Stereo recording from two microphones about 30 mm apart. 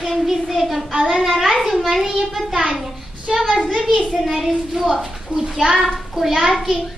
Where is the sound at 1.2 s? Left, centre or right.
Centre.